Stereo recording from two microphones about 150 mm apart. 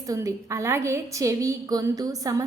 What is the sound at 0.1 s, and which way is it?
A woman's voice, 20° right (ahead or behind).